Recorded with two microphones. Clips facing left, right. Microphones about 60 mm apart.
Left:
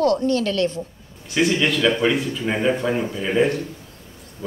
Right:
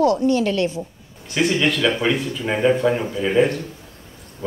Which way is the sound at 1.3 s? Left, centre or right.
Centre.